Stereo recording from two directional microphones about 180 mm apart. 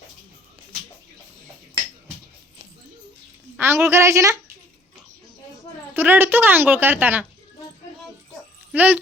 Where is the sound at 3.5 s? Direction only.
15° right (ahead or behind).